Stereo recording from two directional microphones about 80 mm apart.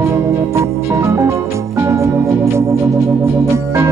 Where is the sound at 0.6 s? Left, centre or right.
Right.